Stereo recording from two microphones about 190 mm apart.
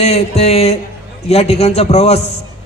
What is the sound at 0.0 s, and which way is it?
A man's voice, 35° left (ahead or behind).